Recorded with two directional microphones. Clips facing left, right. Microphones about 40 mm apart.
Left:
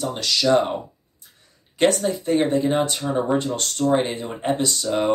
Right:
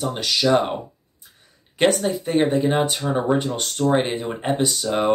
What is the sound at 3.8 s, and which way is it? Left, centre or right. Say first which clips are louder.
Speech: right 1 dB; right.